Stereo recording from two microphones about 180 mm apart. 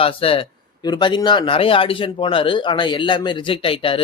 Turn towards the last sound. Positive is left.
turn(degrees=30)  # may be behind; listen again after turning